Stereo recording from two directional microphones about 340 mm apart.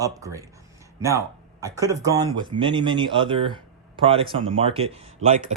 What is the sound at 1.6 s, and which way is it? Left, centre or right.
Speech, centre.